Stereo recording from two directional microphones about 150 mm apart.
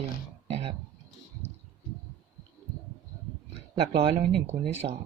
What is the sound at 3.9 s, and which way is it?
Speech, 45° right (ahead or behind).